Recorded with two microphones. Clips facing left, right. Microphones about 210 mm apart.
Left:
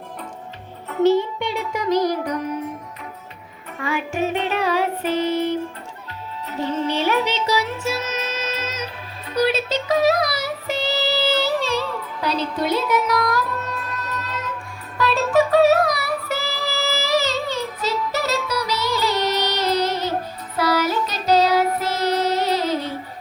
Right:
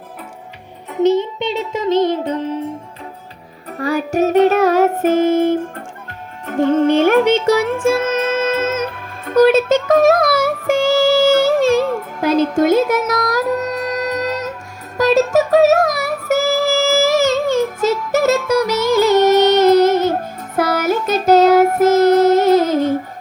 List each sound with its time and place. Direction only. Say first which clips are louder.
0.9 s music: right 2 dB; 20° right (ahead or behind)
3.8 s music: right 7 dB; 40° right (ahead or behind)